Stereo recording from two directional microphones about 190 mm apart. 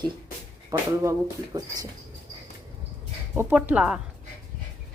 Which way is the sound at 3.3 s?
10° right (ahead or behind).